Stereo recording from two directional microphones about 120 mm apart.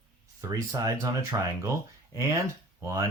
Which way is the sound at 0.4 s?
25° right (ahead or behind).